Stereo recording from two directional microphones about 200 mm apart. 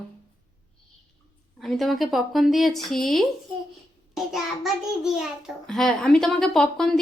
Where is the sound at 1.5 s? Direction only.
Centre (ahead or behind).